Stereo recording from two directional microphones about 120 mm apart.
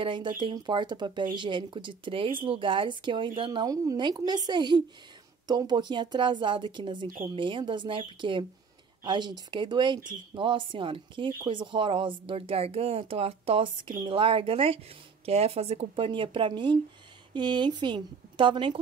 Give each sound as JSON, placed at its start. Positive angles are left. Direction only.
{"t": 0.0, "sound": "speech", "side_deg": -40}
{"t": 3.6, "sound": "speech", "side_deg": -30}
{"t": 16.1, "sound": "speech", "side_deg": -45}